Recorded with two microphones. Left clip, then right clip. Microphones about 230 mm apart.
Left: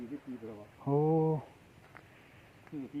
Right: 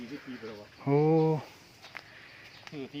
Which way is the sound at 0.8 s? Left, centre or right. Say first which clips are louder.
Right 4 dB; right.